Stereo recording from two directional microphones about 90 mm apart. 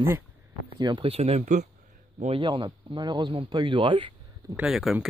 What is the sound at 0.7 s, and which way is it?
Speech, 70° right (ahead or behind).